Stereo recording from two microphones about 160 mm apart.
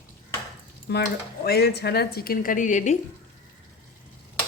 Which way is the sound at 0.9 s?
90° left.